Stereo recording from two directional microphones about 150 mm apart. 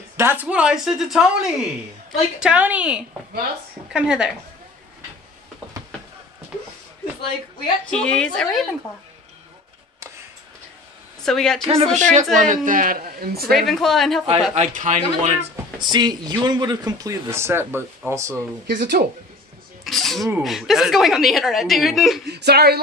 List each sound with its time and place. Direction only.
0.2 s a woman's voice: 10° right (ahead or behind)
7.9 s a woman's voice: 5° left (ahead or behind)
11.2 s a woman's voice: 5° left (ahead or behind)
11.6 s a man's voice: 40° right (ahead or behind); by 13.5 s 85° right
13.5 s a woman's voice: centre (ahead or behind)
14.5 s a man's voice: 55° right (ahead or behind)
15.8 s a man's voice: 30° right (ahead or behind)
18.7 s speech: 70° right (ahead or behind)
19.8 s a sound: centre (ahead or behind)
20.4 s a woman's voice: centre (ahead or behind)
22.2 s speech: 90° right